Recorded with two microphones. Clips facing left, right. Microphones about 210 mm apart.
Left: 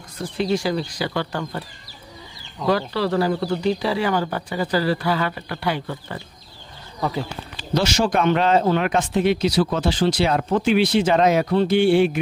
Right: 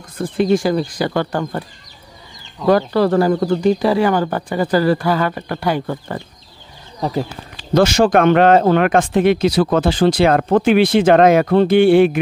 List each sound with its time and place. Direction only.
0.2 s speech: 50° right (ahead or behind)
2.7 s speech: 50° right (ahead or behind)
7.7 s speech: 50° right (ahead or behind)